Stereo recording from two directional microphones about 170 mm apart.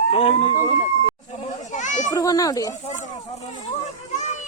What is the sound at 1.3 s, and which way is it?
Children playing, 40° left (ahead or behind).